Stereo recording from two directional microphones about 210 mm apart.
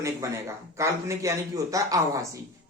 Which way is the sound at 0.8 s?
15° right (ahead or behind).